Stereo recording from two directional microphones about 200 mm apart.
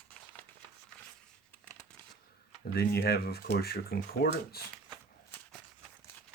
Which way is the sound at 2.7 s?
55° left (ahead or behind).